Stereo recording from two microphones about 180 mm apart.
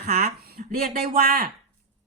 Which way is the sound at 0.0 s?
60° right (ahead or behind).